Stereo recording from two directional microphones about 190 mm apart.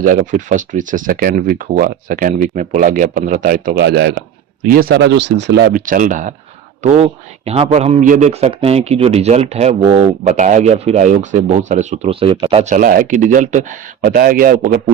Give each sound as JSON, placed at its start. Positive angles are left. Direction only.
{"t": 0.0, "sound": "speech", "side_deg": -45}
{"t": 4.7, "sound": "speech", "side_deg": -50}
{"t": 5.8, "sound": "speech", "side_deg": -45}